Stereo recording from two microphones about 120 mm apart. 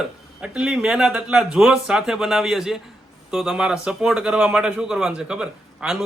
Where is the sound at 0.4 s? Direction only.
5° right (ahead or behind).